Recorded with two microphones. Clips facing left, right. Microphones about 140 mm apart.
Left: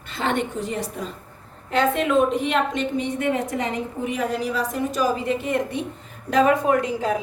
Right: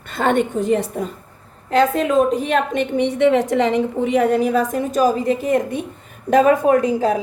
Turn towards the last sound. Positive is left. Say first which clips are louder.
# right 6 dB
turn(degrees=-45)  # may be behind; listen again after turning